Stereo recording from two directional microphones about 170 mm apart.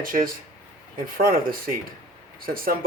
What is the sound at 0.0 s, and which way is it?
Speech, 55° right (ahead or behind).